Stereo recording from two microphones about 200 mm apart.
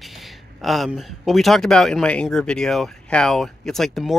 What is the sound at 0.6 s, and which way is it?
Speech, centre (ahead or behind).